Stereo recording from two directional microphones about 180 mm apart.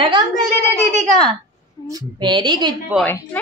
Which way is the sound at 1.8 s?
20° right (ahead or behind).